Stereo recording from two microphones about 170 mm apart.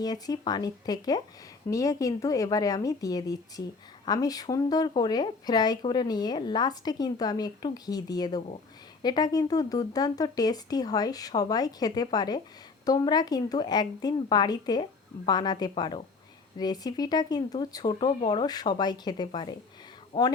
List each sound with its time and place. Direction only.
0.0 s speech: 25° left (ahead or behind)